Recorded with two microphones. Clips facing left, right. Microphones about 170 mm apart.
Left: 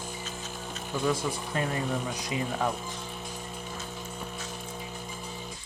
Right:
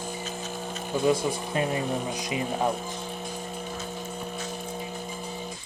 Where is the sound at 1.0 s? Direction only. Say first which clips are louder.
Right 5 dB; 15° right (ahead or behind).